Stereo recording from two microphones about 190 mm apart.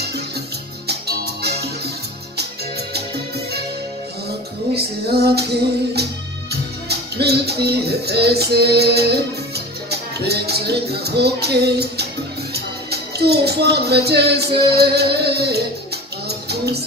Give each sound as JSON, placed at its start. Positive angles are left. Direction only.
{"t": 0.8, "sound": "music", "side_deg": -60}
{"t": 4.7, "sound": "music", "side_deg": -55}